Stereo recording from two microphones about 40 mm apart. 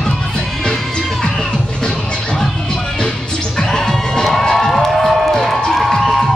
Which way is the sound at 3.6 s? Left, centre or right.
Centre.